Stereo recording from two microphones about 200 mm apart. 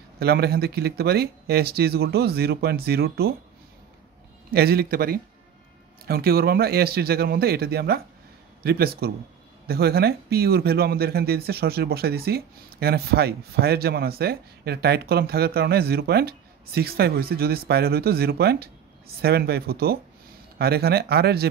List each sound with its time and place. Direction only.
0.2 s speech: 55° right (ahead or behind)
4.5 s speech: 50° right (ahead or behind)